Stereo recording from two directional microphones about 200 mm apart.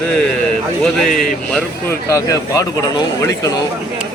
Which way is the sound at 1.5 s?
15° left (ahead or behind).